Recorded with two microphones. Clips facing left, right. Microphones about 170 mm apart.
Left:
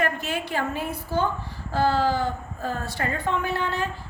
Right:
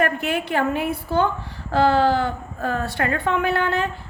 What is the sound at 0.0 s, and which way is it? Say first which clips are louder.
A woman's voice: right 4 dB; 60° right (ahead or behind).